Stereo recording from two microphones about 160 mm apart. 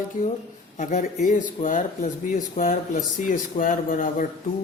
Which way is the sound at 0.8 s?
50° left (ahead or behind).